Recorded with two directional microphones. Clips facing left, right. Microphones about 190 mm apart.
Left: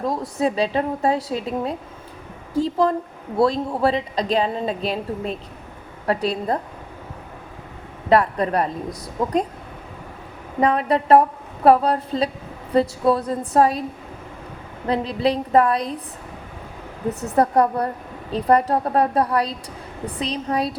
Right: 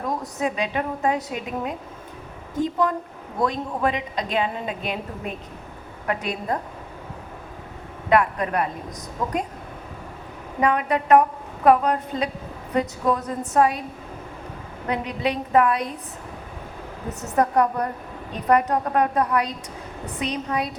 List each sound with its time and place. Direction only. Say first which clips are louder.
0.0 s a woman's voice: left 4 dB; 30° left (ahead or behind)
8.1 s a woman's voice: left 3 dB; 35° left (ahead or behind)
10.6 s a woman's voice: left 3 dB; 35° left (ahead or behind)
14.8 s a woman's voice: left 4 dB; 35° left (ahead or behind)
17.3 s a woman's voice: left 2 dB; 35° left (ahead or behind)